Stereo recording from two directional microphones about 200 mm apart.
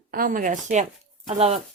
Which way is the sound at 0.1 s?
45° right (ahead or behind).